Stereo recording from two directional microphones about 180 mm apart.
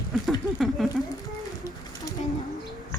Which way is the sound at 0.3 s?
Centre (ahead or behind).